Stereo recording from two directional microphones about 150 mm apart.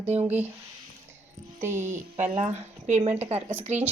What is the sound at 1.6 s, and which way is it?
Speech, 55° right (ahead or behind).